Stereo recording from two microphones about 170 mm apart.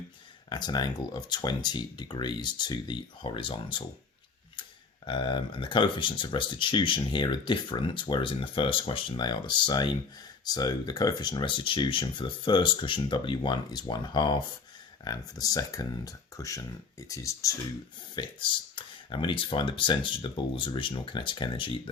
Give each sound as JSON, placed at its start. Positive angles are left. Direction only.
{"t": 0.5, "sound": "speech", "side_deg": 25}
{"t": 5.0, "sound": "speech", "side_deg": 30}
{"t": 18.2, "sound": "speech", "side_deg": 30}